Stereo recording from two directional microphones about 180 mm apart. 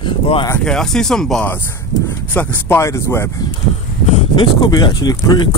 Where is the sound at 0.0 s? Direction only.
30° left (ahead or behind).